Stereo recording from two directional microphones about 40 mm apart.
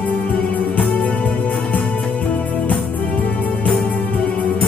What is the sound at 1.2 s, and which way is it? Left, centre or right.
Music, left.